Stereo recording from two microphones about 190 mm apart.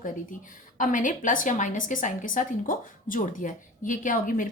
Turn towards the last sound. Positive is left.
turn(degrees=45)  # may be behind; listen again after turning